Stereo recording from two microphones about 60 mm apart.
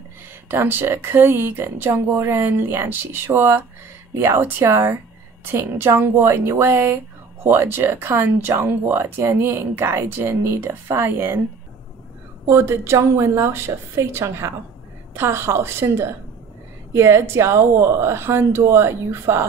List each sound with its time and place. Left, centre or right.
0.5 s speech: right
12.4 s speech: right